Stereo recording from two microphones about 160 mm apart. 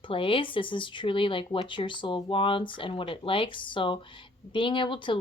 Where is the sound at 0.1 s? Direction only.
35° left (ahead or behind).